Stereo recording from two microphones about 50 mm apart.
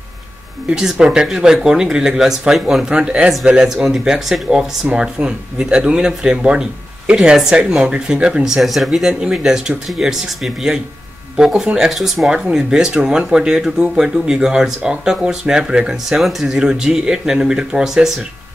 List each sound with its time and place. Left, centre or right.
0.7 s speech: centre
2.9 s speech: right
8.5 s speech: centre
12.5 s speech: centre
16.2 s speech: centre